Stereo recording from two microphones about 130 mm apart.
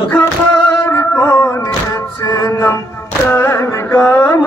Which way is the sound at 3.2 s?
15° left (ahead or behind).